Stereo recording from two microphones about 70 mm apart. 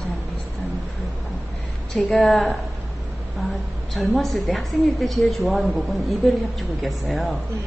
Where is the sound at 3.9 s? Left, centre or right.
Centre.